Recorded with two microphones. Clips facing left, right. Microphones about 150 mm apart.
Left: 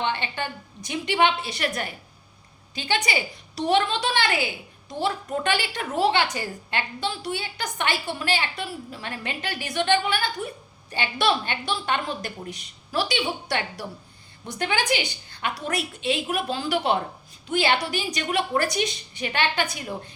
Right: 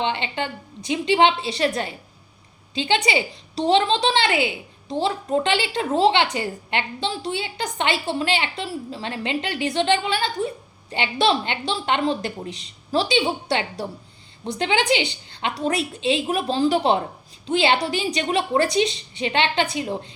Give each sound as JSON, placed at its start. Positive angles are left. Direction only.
{"t": 0.0, "sound": "a woman's voice", "side_deg": -20}